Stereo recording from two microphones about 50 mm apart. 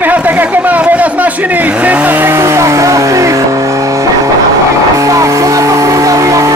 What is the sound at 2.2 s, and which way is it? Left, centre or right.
Speech, right.